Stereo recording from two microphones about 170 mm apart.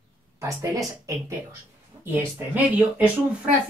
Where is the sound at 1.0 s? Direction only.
20° right (ahead or behind).